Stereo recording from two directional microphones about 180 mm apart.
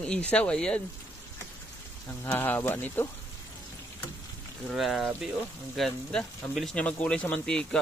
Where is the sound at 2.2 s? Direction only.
10° left (ahead or behind).